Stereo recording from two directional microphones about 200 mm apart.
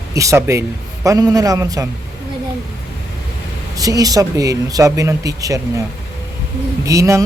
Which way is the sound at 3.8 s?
20° right (ahead or behind).